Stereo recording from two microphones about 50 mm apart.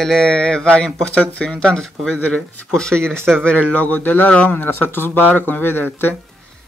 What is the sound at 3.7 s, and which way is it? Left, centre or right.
Speech, left.